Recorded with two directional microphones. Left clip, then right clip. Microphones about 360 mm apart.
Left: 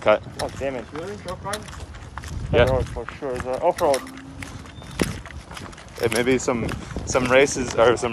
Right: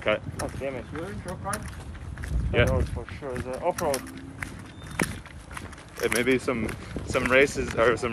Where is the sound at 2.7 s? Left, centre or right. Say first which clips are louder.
Left 6 dB; left.